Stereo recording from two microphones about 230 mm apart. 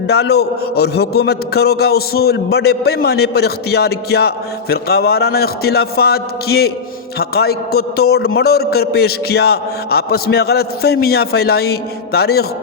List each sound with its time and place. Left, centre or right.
0.1 s a man's voice: left